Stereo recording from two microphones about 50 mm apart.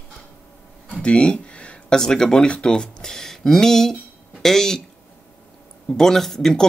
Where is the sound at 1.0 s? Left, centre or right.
Centre.